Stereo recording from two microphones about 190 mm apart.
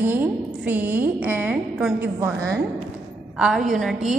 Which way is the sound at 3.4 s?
Centre (ahead or behind).